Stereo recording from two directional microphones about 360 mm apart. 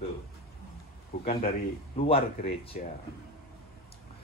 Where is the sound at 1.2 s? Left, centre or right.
Left.